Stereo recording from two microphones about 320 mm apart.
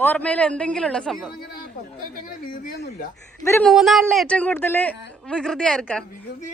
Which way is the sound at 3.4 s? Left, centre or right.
Centre.